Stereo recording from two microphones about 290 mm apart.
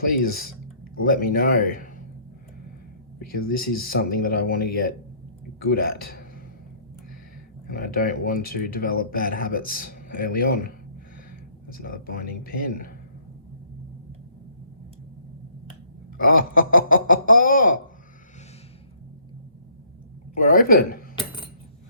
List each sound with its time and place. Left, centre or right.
0.2 s speech: left
3.2 s speech: left
7.7 s speech: left
16.2 s speech: left
20.3 s speech: left
21.2 s coin: centre